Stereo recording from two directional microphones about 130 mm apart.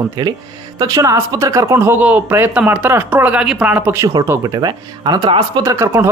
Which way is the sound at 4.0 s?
25° right (ahead or behind).